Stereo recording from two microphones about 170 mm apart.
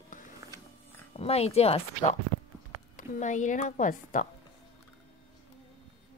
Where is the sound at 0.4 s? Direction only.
20° right (ahead or behind).